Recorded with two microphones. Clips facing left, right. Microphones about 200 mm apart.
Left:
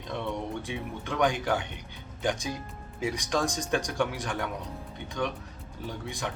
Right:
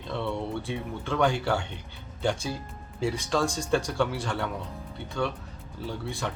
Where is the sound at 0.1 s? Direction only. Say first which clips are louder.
Right 2 dB; 15° left (ahead or behind).